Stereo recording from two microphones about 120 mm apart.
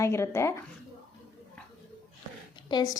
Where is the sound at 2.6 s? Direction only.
35° left (ahead or behind).